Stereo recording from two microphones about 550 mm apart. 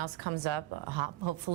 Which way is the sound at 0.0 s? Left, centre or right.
Right.